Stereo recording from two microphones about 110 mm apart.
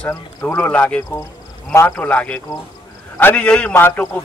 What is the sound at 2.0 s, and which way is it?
A man's voice, 15° left (ahead or behind).